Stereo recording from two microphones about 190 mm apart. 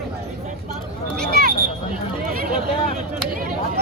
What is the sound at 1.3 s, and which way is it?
Speech, 55° right (ahead or behind).